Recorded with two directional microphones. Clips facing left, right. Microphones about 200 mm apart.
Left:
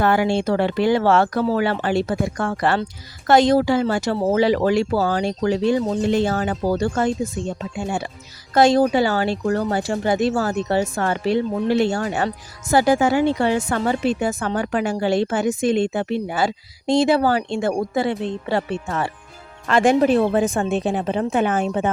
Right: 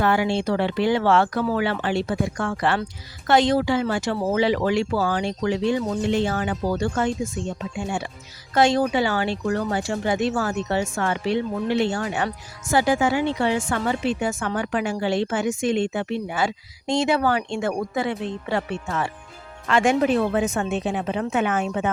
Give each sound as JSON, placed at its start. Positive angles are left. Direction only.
{"t": 0.0, "sound": "speech", "side_deg": 45}